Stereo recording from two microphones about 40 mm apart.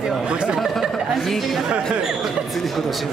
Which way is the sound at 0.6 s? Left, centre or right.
Centre.